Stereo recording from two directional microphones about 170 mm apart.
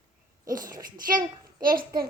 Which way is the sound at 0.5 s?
20° right (ahead or behind).